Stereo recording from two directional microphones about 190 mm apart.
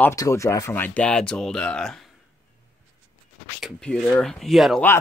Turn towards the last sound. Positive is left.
turn(degrees=0)  # may be behind; listen again after turning